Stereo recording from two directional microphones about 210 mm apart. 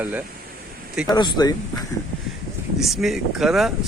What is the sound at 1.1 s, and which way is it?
Speech, 20° left (ahead or behind).